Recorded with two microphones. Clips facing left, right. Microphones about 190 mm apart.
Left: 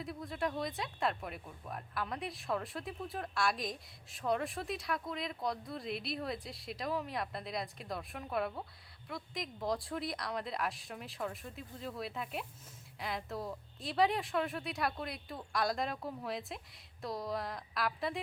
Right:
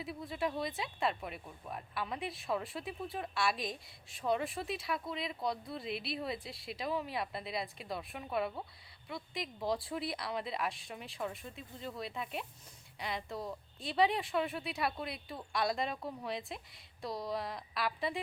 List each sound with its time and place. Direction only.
0.0 s speech: 5° right (ahead or behind)